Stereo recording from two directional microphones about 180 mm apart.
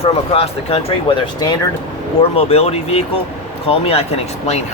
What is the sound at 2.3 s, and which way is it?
Speech, 35° left (ahead or behind).